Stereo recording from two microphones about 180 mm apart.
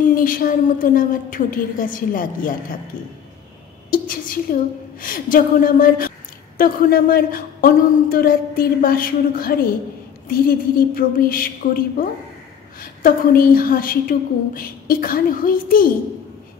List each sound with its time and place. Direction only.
0.1 s a woman's voice: 50° left (ahead or behind)
3.9 s a woman's voice: 50° left (ahead or behind)